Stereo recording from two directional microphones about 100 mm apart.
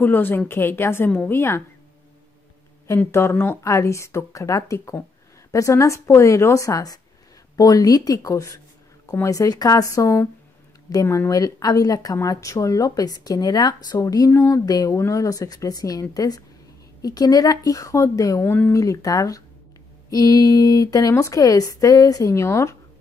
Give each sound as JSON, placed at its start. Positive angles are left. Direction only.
{"t": 0.0, "sound": "speech", "side_deg": 20}
{"t": 3.1, "sound": "speech", "side_deg": 25}